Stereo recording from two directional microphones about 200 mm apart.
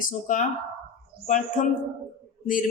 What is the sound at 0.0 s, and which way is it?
Speech, 40° left (ahead or behind).